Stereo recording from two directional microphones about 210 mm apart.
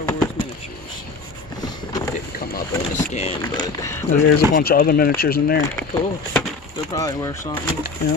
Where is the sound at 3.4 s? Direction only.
15° left (ahead or behind).